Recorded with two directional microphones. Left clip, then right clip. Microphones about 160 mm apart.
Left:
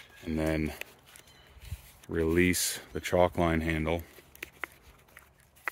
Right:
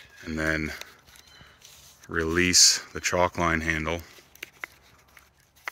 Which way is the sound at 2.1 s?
15° left (ahead or behind).